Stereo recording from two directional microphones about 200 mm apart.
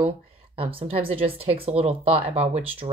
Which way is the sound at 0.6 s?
30° right (ahead or behind).